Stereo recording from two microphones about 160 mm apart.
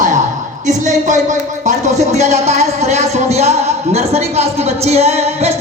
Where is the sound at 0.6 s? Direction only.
50° right (ahead or behind).